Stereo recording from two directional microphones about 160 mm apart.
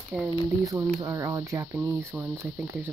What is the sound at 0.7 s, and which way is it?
Speech, 20° right (ahead or behind).